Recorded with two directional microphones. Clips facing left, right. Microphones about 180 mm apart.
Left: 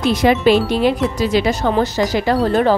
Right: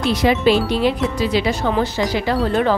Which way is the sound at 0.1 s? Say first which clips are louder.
Left 2 dB; 50° left (ahead or behind).